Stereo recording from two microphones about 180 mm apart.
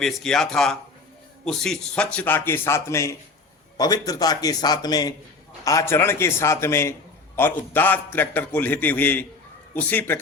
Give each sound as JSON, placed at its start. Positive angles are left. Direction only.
{"t": 0.0, "sound": "a man's voice", "side_deg": 0}